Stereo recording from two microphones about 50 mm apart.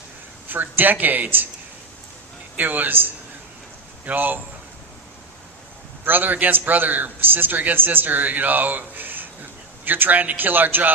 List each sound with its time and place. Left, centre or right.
0.4 s a man's voice: right
2.6 s a man's voice: right
6.1 s a man's voice: right